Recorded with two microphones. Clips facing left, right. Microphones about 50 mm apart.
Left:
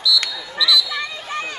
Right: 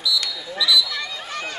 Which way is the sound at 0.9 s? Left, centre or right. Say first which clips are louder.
Left 3 dB; left.